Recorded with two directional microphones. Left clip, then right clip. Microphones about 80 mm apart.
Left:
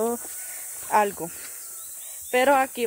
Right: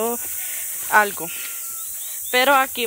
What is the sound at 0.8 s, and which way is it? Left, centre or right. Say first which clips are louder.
Speech: right 4 dB; left.